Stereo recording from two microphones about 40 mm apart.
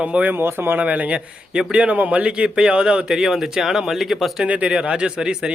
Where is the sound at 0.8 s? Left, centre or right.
Right.